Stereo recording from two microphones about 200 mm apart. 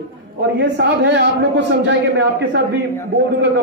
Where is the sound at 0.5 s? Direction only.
60° right (ahead or behind).